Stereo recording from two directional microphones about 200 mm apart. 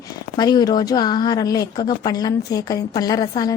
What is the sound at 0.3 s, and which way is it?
A woman's voice, 20° left (ahead or behind).